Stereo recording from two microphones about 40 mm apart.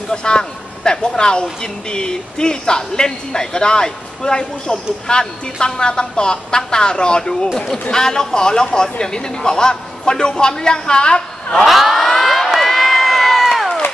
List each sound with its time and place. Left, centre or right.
0.1 s a man's voice: left
11.6 s a sound: centre
12.5 s crowd: centre